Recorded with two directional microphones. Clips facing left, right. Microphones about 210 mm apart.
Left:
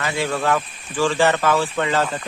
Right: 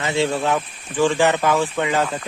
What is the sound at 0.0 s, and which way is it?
Speech, 25° right (ahead or behind).